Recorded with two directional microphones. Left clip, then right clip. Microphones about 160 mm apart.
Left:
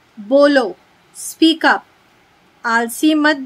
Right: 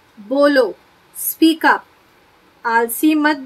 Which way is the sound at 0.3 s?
45° left (ahead or behind).